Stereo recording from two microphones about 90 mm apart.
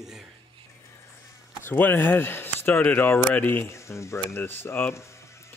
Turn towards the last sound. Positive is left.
turn(degrees=25)  # may be behind; listen again after turning